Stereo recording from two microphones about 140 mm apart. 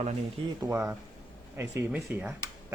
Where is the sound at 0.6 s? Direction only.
25° right (ahead or behind).